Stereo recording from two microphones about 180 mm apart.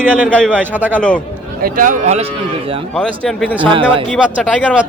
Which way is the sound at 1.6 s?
50° right (ahead or behind).